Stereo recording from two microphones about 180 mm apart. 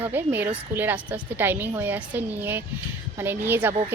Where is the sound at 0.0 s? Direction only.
10° right (ahead or behind).